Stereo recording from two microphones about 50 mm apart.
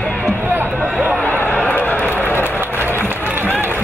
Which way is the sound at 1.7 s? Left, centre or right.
Left.